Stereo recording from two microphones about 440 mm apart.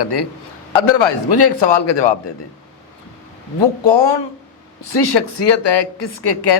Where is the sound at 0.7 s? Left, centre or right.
Left.